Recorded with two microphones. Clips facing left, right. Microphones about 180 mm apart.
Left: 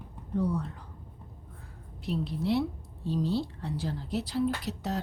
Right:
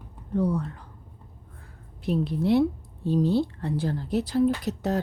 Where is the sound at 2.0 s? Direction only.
55° right (ahead or behind).